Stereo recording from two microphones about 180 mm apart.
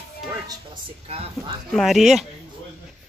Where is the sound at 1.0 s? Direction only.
35° right (ahead or behind).